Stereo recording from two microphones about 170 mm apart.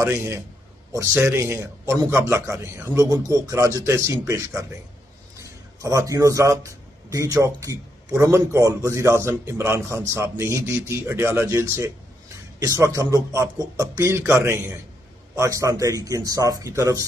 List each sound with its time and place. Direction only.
0.0 s a man's voice: 15° right (ahead or behind)
5.8 s a man's voice: 20° right (ahead or behind)